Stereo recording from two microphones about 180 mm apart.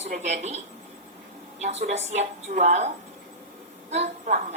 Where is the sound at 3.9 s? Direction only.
40° right (ahead or behind).